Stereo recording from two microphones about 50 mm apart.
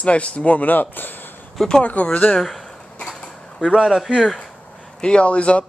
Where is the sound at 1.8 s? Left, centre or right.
Left.